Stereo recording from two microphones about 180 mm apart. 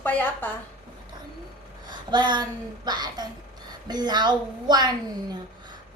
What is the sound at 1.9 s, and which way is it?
A woman's voice, 25° right (ahead or behind).